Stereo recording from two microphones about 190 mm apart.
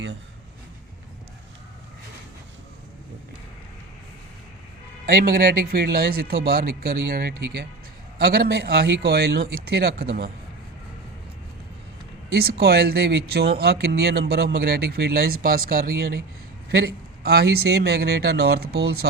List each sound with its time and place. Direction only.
5.0 s speech: 50° right (ahead or behind)
12.3 s speech: 55° right (ahead or behind)